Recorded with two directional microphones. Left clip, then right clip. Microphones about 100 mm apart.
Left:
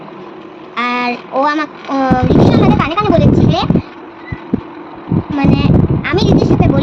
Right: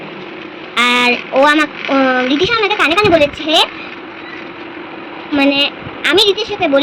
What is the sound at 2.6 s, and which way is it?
Speech, 10° left (ahead or behind).